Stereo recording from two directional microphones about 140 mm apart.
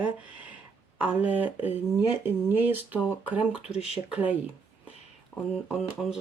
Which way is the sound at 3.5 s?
45° left (ahead or behind).